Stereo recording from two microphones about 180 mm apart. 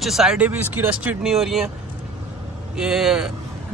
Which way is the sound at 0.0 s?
Centre (ahead or behind).